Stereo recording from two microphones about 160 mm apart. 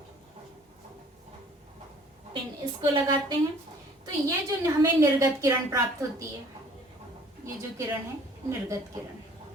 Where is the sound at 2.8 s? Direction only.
30° right (ahead or behind).